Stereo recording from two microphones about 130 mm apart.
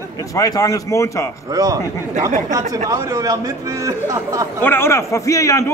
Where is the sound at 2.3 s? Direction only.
80° right.